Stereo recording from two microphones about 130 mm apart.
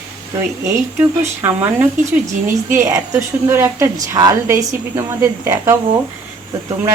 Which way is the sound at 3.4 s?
20° right (ahead or behind).